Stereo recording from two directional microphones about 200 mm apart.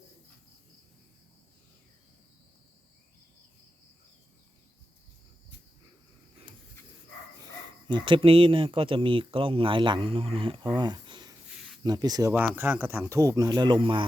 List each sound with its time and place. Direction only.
7.4 s speech: 25° right (ahead or behind)